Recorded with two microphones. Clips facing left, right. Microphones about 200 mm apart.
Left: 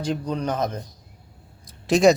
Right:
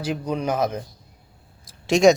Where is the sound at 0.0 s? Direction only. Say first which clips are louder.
Even; 10° right (ahead or behind).